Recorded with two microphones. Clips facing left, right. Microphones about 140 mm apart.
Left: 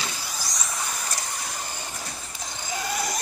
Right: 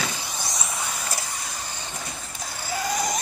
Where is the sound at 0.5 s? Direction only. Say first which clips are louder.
Even; centre (ahead or behind).